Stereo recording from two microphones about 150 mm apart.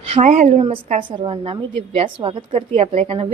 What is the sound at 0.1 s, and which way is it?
A woman's voice, 50° right (ahead or behind).